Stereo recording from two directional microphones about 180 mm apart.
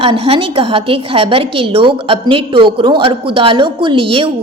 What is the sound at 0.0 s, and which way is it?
A woman's voice, 30° right (ahead or behind).